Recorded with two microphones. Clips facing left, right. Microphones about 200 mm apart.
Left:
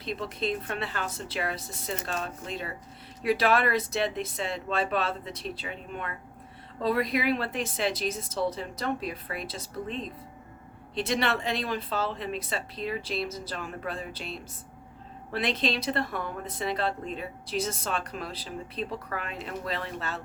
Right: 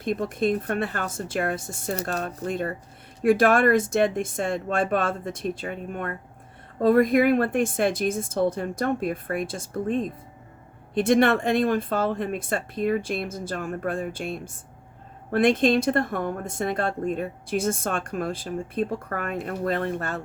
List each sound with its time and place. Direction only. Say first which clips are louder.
0.0 s a woman's voice: right 7 dB; 50° right (ahead or behind)